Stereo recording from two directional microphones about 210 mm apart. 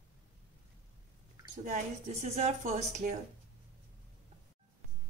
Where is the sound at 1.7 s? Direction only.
35° right (ahead or behind).